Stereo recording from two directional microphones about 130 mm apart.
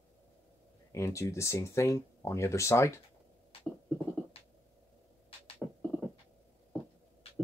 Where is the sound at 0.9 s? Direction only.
25° left (ahead or behind).